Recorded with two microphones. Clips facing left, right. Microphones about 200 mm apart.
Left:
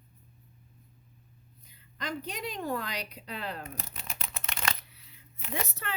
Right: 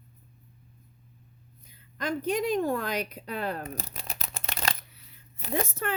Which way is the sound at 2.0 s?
50° right (ahead or behind).